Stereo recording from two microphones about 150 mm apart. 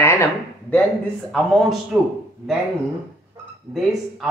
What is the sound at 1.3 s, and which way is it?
Speech, centre (ahead or behind).